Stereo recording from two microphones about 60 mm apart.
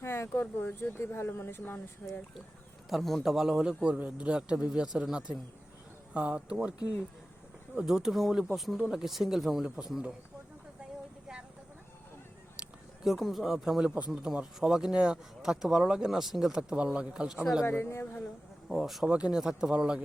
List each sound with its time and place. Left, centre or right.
0.0 s speech: left
2.9 s speech: centre
3.3 s speech: centre
6.1 s speech: right
7.8 s speech: centre
13.1 s speech: centre
13.8 s speech: right
14.6 s speech: centre
17.7 s a woman's voice: left
18.7 s speech: centre
19.0 s speech: centre